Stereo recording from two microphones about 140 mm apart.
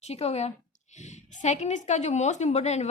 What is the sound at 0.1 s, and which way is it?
A woman's voice, 50° left (ahead or behind).